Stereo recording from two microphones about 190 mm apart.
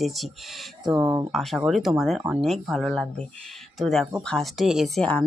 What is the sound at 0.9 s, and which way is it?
Speech, 15° right (ahead or behind).